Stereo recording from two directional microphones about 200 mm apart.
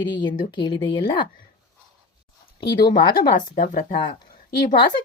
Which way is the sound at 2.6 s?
25° left (ahead or behind).